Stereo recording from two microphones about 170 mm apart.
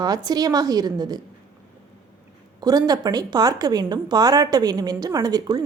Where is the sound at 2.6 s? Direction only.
25° right (ahead or behind).